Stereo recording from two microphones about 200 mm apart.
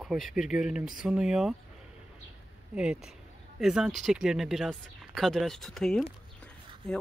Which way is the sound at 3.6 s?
5° right (ahead or behind).